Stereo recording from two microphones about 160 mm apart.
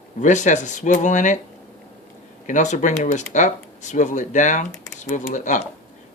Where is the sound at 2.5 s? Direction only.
50° left (ahead or behind).